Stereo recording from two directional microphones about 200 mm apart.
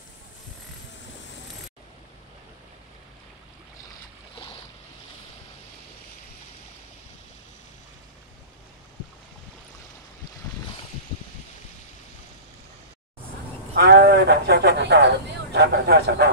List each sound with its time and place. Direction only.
13.7 s speech: 55° right (ahead or behind)